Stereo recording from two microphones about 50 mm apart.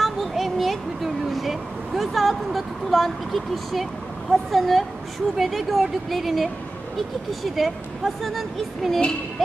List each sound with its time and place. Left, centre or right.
0.0 s vehicle: centre
4.3 s a woman's voice: centre